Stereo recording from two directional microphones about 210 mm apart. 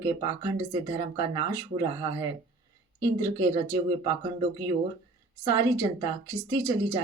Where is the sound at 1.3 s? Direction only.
20° right (ahead or behind).